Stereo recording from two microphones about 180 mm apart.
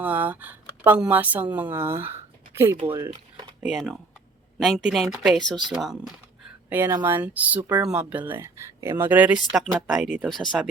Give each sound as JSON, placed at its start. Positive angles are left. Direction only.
{"t": 0.0, "sound": "speech", "side_deg": -10}
{"t": 2.8, "sound": "speech", "side_deg": -30}
{"t": 3.7, "sound": "speech", "side_deg": 0}
{"t": 6.7, "sound": "speech", "side_deg": -10}